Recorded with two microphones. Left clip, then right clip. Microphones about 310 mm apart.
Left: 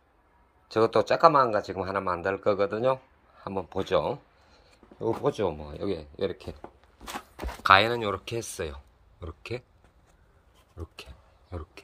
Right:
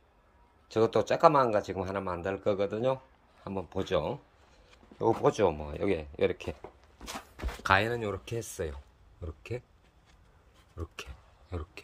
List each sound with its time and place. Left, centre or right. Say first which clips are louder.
0.7 s a man's voice: left 4 dB; centre
7.6 s speech: left 7 dB; centre
11.5 s a man's voice: even; centre